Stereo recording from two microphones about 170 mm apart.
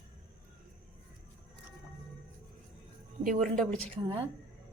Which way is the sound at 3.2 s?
50° right (ahead or behind).